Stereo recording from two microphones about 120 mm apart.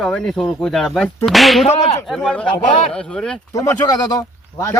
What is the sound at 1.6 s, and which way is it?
Whip, 60° left (ahead or behind).